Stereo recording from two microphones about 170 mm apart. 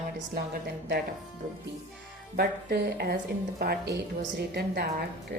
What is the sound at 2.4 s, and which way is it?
A woman's voice, 65° right (ahead or behind).